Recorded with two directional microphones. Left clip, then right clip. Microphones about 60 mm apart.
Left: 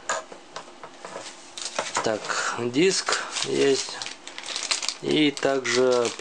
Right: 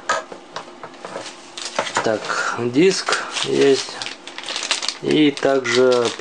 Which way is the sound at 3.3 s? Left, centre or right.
Centre.